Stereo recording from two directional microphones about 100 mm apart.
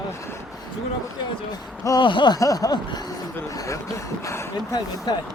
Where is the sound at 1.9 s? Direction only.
50° left (ahead or behind).